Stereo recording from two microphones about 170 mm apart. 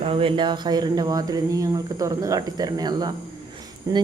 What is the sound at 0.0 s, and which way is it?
Speech, 35° right (ahead or behind).